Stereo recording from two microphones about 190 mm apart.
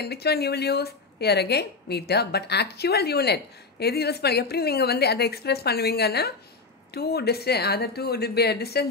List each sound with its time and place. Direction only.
0.0 s speech: 60° left (ahead or behind)